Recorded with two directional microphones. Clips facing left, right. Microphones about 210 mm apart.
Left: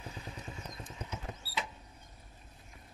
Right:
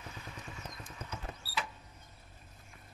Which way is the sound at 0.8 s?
15° left (ahead or behind).